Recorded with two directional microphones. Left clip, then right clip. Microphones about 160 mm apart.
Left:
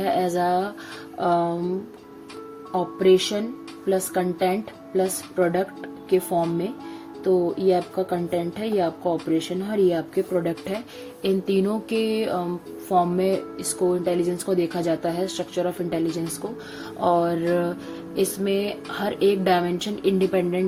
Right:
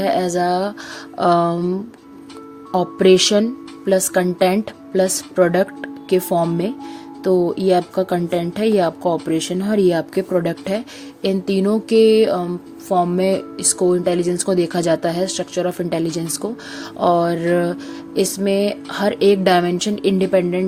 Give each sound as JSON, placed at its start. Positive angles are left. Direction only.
{"t": 0.0, "sound": "music", "side_deg": -50}
{"t": 1.2, "sound": "a woman's voice", "side_deg": -65}
{"t": 2.7, "sound": "a woman's voice", "side_deg": -75}
{"t": 3.8, "sound": "a woman's voice", "side_deg": -65}
{"t": 7.3, "sound": "a woman's voice", "side_deg": -90}
{"t": 11.2, "sound": "music", "side_deg": -45}
{"t": 12.9, "sound": "speech", "side_deg": -45}
{"t": 17.0, "sound": "music", "side_deg": -55}